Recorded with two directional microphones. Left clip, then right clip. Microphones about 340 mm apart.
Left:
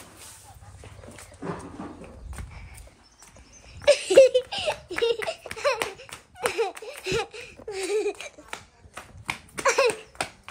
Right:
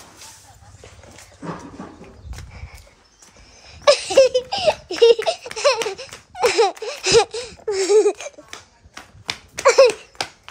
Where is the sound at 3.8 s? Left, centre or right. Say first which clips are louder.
Right 5 dB; centre.